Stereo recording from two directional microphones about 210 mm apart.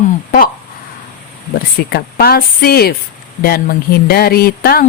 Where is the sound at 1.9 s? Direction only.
45° left (ahead or behind).